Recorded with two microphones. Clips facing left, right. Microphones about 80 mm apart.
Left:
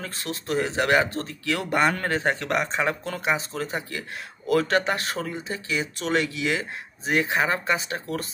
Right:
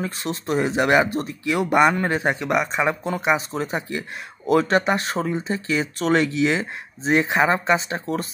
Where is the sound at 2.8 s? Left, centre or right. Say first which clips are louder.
Right 4 dB; right.